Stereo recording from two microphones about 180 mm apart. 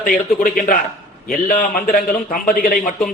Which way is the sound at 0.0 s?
55° left (ahead or behind).